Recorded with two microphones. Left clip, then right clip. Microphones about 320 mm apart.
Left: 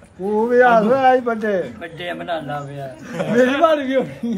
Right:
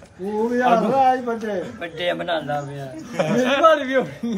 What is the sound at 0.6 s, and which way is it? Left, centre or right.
A man's voice, centre.